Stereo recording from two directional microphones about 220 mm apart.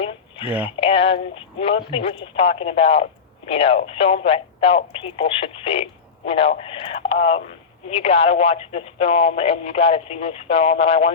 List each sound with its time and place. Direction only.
0.4 s speech: 5° right (ahead or behind)
0.8 s speech: 25° left (ahead or behind)